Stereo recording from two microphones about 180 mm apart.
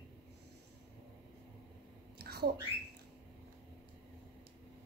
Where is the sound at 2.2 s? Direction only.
60° right (ahead or behind).